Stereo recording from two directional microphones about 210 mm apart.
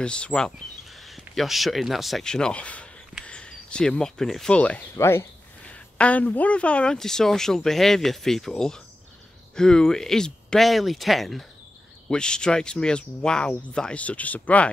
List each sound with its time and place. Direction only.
0.0 s speech: 5° left (ahead or behind)